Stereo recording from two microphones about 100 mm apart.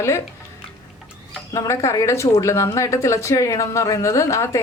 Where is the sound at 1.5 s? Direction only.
30° left (ahead or behind).